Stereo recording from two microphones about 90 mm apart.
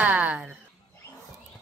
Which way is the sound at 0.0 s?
15° right (ahead or behind).